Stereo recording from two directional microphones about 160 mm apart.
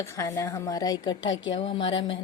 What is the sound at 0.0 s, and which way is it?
A woman's voice, 20° left (ahead or behind).